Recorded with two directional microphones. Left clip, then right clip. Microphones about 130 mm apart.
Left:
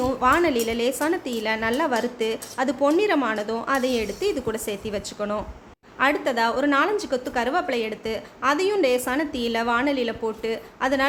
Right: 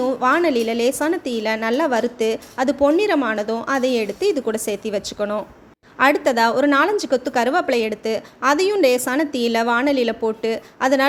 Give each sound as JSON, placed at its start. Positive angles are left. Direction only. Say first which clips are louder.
{"t": 0.0, "sound": "a woman's voice", "louder": "right 2 dB", "side_deg": -25}
{"t": 6.0, "sound": "a woman's voice", "louder": "right 5 dB", "side_deg": -45}